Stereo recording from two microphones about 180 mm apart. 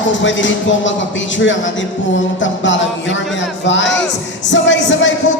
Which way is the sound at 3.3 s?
90° left.